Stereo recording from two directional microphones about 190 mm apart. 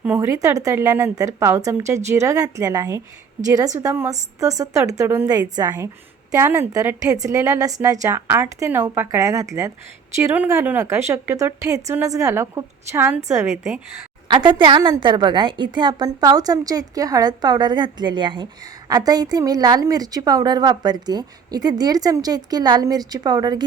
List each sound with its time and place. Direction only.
0.0 s a woman's voice: 10° right (ahead or behind)
14.4 s a woman's voice: 25° right (ahead or behind)